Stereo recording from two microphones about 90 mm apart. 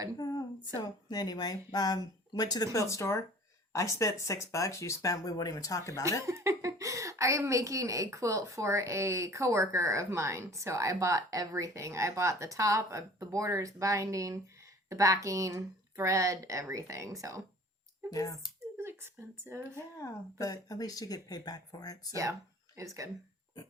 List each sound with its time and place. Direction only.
0.2 s a woman's voice: 45° left (ahead or behind)
2.7 s speech: 35° left (ahead or behind)
6.2 s a woman's voice: 35° right (ahead or behind)
18.1 s speech: 40° left (ahead or behind)
18.8 s a sound: 25° right (ahead or behind)
20.0 s speech: 40° left (ahead or behind)
22.1 s a woman's voice: 35° right (ahead or behind)